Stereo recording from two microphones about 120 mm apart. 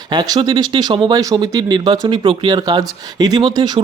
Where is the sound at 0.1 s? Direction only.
35° right (ahead or behind).